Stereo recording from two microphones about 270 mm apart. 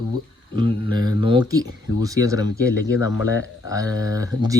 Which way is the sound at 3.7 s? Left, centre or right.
Centre.